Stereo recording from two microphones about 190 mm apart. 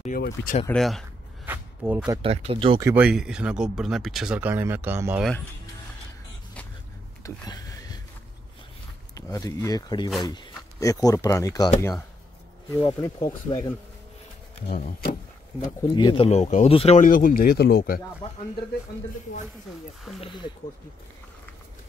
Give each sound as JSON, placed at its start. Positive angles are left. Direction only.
{"t": 0.1, "sound": "speech", "side_deg": 45}
{"t": 0.7, "sound": "speech", "side_deg": 0}
{"t": 1.4, "sound": "a sound", "side_deg": -10}
{"t": 2.2, "sound": "speech", "side_deg": -30}
{"t": 2.8, "sound": "speech", "side_deg": -10}
{"t": 7.2, "sound": "a sound", "side_deg": 20}
{"t": 9.1, "sound": "speech", "side_deg": 15}
{"t": 14.7, "sound": "speech", "side_deg": 45}
{"t": 15.9, "sound": "speech", "side_deg": 25}
{"t": 20.2, "sound": "speech", "side_deg": 25}